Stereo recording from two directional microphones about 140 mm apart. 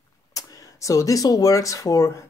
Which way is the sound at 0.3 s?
25° left (ahead or behind).